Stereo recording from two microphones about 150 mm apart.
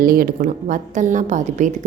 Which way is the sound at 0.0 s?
80° right.